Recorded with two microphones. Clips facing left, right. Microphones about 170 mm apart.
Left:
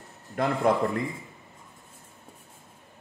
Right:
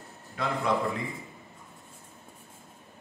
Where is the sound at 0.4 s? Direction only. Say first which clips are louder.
Left 5 dB; 55° left (ahead or behind).